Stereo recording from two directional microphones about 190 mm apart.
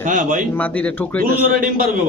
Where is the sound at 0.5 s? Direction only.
10° left (ahead or behind).